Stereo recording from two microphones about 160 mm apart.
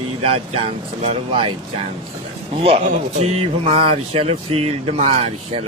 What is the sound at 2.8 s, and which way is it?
Speech, 40° right (ahead or behind).